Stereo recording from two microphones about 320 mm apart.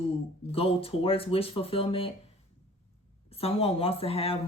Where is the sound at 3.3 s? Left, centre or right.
Centre.